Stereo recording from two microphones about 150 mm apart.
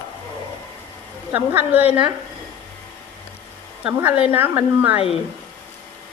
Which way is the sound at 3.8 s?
10° right (ahead or behind).